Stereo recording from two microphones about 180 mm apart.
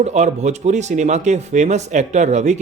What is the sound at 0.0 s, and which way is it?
Speech, 40° right (ahead or behind).